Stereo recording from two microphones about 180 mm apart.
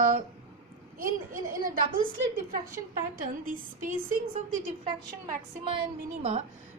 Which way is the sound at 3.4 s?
50° right (ahead or behind).